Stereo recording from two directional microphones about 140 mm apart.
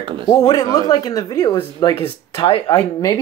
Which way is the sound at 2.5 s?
40° left (ahead or behind).